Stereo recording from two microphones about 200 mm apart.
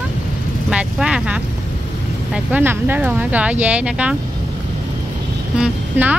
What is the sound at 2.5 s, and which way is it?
Speech, 10° right (ahead or behind).